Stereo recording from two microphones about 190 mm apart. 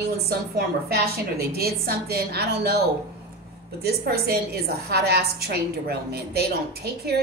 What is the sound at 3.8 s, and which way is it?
A woman's voice, 55° right (ahead or behind).